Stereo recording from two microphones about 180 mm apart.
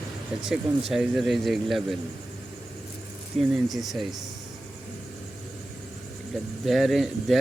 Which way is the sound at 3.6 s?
Centre (ahead or behind).